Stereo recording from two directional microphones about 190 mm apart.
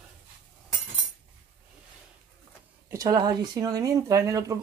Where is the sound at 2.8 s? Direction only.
20° right (ahead or behind).